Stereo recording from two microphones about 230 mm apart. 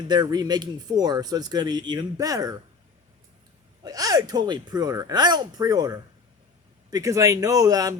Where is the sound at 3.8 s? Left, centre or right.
Centre.